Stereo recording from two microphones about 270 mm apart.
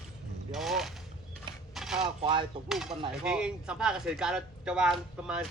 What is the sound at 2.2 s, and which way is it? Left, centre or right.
Speech, centre.